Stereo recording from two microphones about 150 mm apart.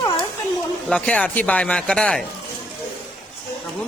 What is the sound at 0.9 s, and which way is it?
A man's voice, 5° left (ahead or behind).